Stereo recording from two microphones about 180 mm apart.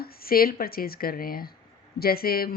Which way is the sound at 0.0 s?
55° left (ahead or behind).